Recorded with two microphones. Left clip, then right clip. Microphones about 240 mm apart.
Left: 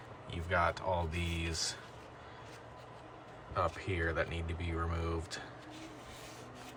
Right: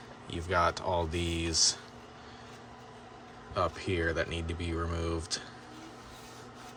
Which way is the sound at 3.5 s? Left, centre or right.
Centre.